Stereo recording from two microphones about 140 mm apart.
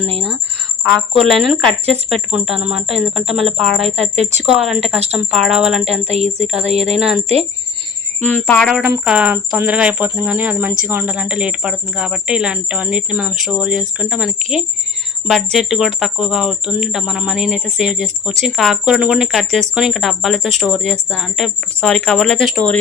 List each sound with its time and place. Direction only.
0.9 s speech: 5° left (ahead or behind)
3.8 s speech: 50° right (ahead or behind)
4.4 s speech: centre (ahead or behind)
6.1 s speech: 50° right (ahead or behind)
6.9 s speech: 5° right (ahead or behind)
8.2 s speech: 15° left (ahead or behind)
9.0 s speech: 10° right (ahead or behind)